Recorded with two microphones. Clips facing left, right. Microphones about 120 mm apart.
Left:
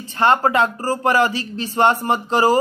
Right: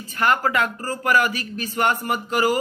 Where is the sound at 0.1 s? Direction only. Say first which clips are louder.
Left 4 dB; 30° left (ahead or behind).